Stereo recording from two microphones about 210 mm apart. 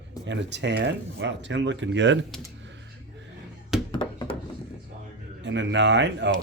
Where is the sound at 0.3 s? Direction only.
55° right (ahead or behind).